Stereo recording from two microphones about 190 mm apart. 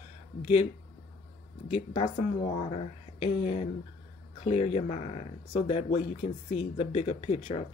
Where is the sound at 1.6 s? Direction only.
35° left (ahead or behind).